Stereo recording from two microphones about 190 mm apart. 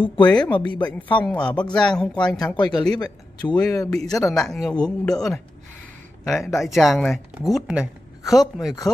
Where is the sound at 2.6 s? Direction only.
20° left (ahead or behind).